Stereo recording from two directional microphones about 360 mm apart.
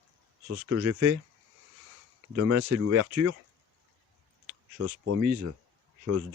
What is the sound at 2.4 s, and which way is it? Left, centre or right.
Speech, right.